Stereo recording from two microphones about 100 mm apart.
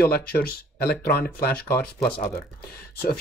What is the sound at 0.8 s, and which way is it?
Speech, 10° left (ahead or behind).